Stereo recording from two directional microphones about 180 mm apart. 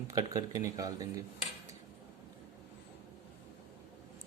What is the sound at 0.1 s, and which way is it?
Speech, 20° right (ahead or behind).